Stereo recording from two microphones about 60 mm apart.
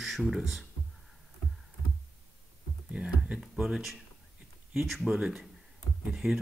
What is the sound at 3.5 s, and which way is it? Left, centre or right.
Speech, centre.